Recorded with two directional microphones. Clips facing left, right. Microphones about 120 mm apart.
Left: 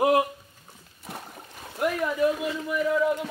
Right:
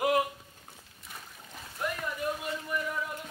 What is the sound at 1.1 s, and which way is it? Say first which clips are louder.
Boat: left 8 dB; 60° left (ahead or behind).